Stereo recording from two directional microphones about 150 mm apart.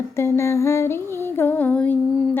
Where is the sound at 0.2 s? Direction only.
20° left (ahead or behind).